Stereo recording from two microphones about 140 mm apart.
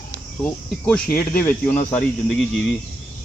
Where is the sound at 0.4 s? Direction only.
10° left (ahead or behind).